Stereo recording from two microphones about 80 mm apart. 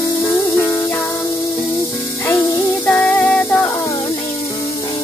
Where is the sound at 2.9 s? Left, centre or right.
Centre.